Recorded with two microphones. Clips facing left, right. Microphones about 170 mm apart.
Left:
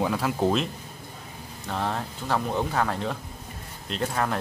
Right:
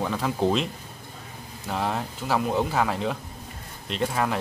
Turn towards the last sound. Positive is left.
turn(degrees=0)  # may be behind; listen again after turning